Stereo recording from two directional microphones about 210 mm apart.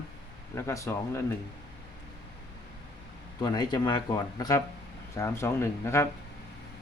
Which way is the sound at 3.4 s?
20° left (ahead or behind).